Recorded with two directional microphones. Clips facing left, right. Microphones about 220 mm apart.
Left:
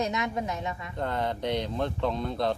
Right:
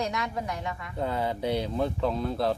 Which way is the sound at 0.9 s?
5° right (ahead or behind).